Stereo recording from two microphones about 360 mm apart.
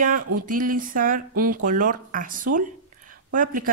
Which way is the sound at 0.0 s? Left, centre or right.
Right.